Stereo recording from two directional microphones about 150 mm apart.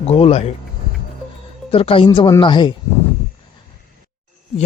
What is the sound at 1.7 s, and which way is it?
Speech, 40° left (ahead or behind).